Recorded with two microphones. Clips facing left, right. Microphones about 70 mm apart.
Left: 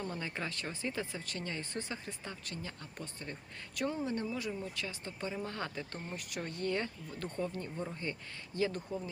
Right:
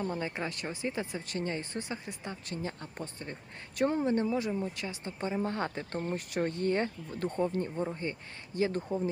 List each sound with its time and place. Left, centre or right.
0.0 s speech: centre
1.9 s speech: centre
2.6 s speech: right
3.8 s speech: right
4.3 s speech: right